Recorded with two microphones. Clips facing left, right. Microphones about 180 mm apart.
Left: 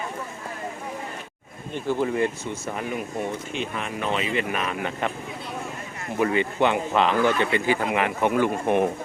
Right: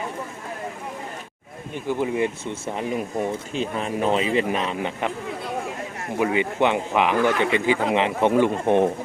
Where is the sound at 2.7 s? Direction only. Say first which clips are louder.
Right 4 dB; 30° right (ahead or behind).